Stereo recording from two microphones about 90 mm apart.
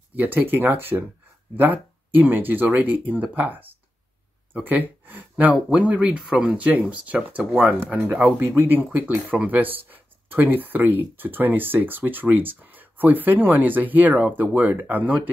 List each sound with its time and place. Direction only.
0.1 s speech: 20° right (ahead or behind)
4.6 s speech: 20° right (ahead or behind)